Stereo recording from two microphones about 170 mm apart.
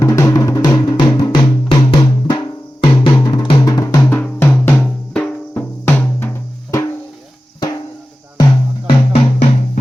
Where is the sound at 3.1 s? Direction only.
25° left (ahead or behind); by 5.3 s 5° left (ahead or behind).